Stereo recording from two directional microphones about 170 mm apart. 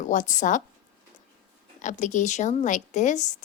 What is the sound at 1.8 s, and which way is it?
A woman's voice, 45° left (ahead or behind).